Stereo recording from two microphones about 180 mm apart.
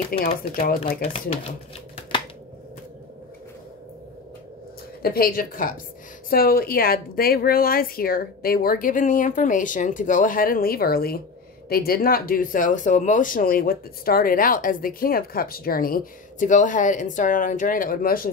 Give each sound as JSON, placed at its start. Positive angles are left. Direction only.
{"t": 0.1, "sound": "speech", "side_deg": 55}
{"t": 5.0, "sound": "a woman's voice", "side_deg": 55}